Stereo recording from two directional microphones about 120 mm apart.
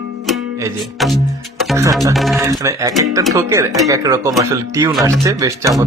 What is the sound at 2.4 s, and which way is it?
Speech, 30° right (ahead or behind).